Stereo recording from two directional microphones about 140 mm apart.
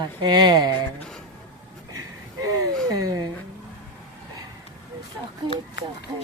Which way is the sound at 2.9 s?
25° right (ahead or behind).